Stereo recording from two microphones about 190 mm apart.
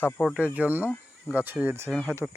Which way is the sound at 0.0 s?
Centre (ahead or behind).